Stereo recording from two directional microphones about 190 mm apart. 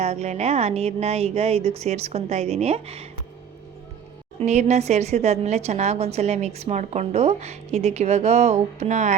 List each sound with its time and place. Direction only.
0.0 s a woman's voice: 35° right (ahead or behind)
4.4 s a woman's voice: 35° right (ahead or behind)